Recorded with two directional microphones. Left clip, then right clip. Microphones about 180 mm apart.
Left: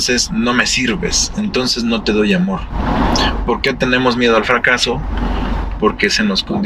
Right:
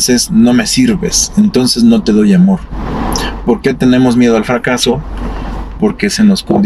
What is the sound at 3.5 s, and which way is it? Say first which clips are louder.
Speech: right 7 dB; 35° right (ahead or behind).